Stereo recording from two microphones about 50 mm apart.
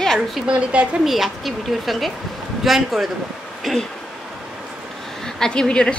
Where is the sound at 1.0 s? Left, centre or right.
Centre.